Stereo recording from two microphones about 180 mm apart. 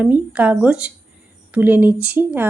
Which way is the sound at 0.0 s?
10° right (ahead or behind).